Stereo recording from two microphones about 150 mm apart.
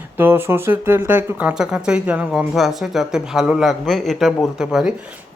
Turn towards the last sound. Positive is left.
turn(degrees=-5)  # may be behind; listen again after turning